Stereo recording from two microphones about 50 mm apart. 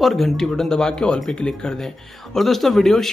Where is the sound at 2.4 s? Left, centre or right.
Centre.